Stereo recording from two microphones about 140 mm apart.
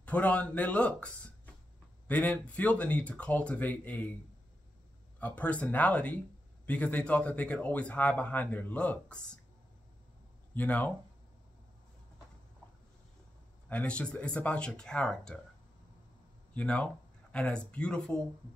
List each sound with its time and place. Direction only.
0.0 s speech: 10° left (ahead or behind)
5.2 s speech: 10° left (ahead or behind)
10.5 s speech: 10° left (ahead or behind)
13.7 s speech: 10° left (ahead or behind)
16.5 s speech: 10° left (ahead or behind)